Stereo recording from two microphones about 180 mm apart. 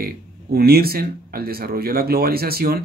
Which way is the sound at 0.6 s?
60° right (ahead or behind).